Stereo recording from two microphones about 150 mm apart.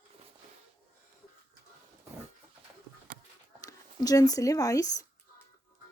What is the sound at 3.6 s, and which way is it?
Speech, 25° left (ahead or behind).